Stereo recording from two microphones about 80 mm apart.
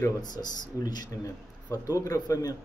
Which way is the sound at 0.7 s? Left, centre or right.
Left.